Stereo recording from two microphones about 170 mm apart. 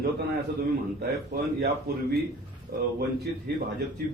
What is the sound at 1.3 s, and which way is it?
Speech, 70° right (ahead or behind).